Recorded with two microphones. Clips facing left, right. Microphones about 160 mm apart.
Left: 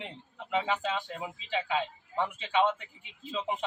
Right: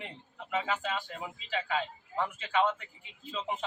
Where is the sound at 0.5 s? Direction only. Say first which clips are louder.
Left 2 dB; 20° left (ahead or behind).